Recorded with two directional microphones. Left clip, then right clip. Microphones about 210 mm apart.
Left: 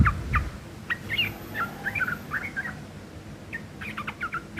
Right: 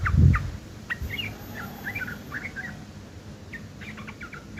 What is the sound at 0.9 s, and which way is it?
Bird, centre (ahead or behind).